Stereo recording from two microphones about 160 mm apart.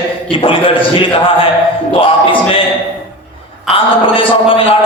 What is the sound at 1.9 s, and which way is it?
Music, 35° left (ahead or behind).